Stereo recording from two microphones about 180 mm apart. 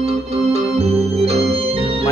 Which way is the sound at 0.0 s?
35° right (ahead or behind).